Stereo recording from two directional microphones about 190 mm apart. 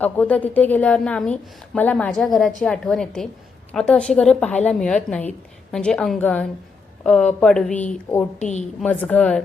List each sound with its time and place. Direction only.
0.0 s a woman's voice: 10° left (ahead or behind)
8.4 s a woman's voice: 40° left (ahead or behind)
8.8 s a woman's voice: 5° left (ahead or behind)